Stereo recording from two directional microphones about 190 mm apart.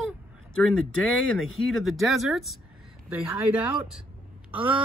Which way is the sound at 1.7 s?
Centre (ahead or behind).